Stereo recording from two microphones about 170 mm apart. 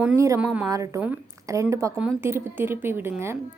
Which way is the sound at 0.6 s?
20° right (ahead or behind).